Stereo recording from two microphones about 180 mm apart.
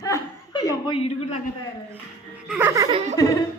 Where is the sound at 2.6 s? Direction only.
15° right (ahead or behind).